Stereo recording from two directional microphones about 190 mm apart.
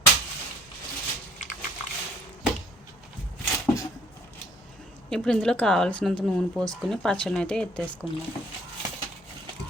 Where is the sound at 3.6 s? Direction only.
15° left (ahead or behind).